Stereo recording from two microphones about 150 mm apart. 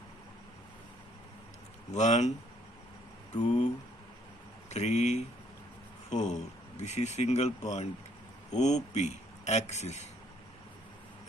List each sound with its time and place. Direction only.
1.9 s a man's voice: 50° left (ahead or behind)
3.4 s a man's voice: 50° left (ahead or behind)
4.7 s a man's voice: 50° left (ahead or behind)